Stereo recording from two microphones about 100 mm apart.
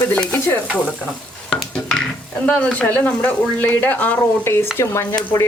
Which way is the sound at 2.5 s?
10° left (ahead or behind).